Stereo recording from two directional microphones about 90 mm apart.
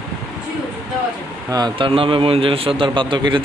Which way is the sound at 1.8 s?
85° right.